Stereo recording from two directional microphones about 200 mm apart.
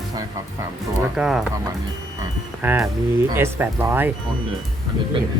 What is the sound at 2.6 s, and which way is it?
Speech, 10° right (ahead or behind).